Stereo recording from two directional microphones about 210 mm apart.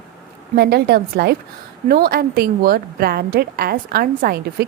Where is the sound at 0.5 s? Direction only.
50° right (ahead or behind).